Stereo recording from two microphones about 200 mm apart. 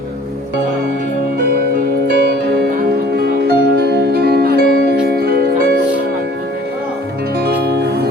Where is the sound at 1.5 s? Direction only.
50° right (ahead or behind).